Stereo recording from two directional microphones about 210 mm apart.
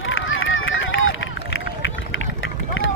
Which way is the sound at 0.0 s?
65° left (ahead or behind).